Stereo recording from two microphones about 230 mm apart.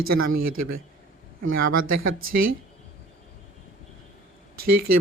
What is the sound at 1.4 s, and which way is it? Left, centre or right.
Speech, right.